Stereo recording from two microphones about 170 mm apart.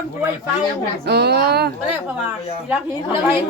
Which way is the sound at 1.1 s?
70° right (ahead or behind).